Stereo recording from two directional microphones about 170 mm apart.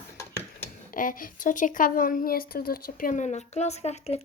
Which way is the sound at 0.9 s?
55° left (ahead or behind).